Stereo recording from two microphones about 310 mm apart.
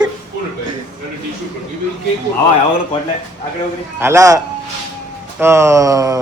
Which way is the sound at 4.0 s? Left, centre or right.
Centre.